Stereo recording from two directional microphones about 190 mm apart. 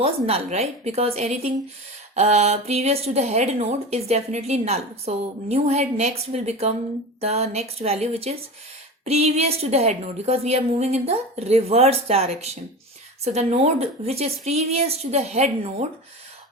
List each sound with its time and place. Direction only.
0.0 s a woman's voice: 30° right (ahead or behind)